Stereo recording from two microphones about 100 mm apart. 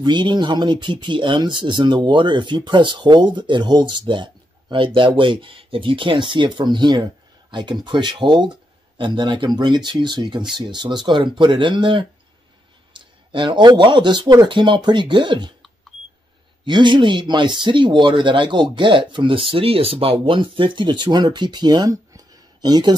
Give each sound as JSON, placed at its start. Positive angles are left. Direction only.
{"t": 0.0, "sound": "speech", "side_deg": -50}
{"t": 13.3, "sound": "speech", "side_deg": -55}
{"t": 16.6, "sound": "speech", "side_deg": -50}